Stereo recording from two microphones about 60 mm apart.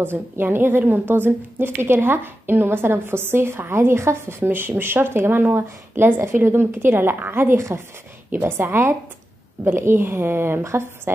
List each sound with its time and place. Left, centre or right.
0.0 s a woman's voice: right
4.4 s a woman's voice: right